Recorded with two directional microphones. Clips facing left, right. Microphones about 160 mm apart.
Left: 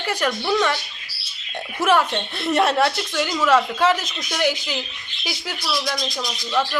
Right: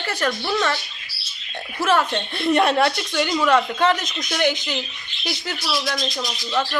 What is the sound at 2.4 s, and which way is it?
Speech, centre (ahead or behind).